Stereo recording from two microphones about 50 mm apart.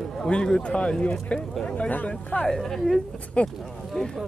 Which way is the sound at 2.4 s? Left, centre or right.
Centre.